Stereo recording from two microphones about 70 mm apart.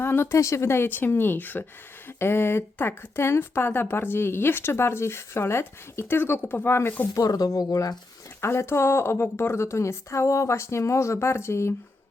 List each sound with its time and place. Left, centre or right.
0.0 s a woman's voice: left
7.1 s speech: left
8.4 s a woman's voice: left